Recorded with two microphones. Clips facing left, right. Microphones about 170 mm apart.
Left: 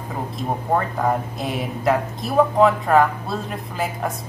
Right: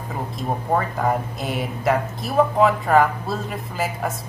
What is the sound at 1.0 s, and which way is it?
Speech, centre (ahead or behind).